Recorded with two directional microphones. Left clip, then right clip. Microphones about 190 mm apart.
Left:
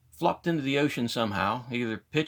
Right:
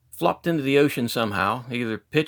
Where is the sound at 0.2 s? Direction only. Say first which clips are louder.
Right 4 dB; 35° right (ahead or behind).